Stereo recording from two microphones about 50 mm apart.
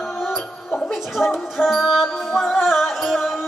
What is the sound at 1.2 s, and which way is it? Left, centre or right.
Music, centre.